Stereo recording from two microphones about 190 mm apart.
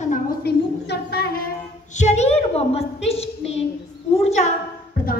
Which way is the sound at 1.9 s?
40° left (ahead or behind).